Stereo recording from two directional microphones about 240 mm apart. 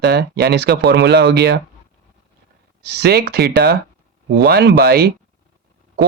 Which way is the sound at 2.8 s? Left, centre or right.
Right.